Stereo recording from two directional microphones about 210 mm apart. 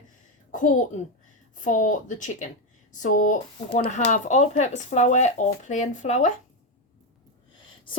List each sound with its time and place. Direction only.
0.5 s a child's voice: 40° left (ahead or behind)